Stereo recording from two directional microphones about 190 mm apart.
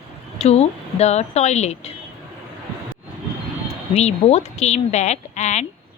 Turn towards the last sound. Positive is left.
turn(degrees=40)  # may be behind; listen again after turning